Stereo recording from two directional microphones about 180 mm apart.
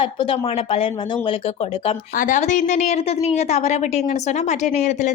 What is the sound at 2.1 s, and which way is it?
Speech, 45° left (ahead or behind).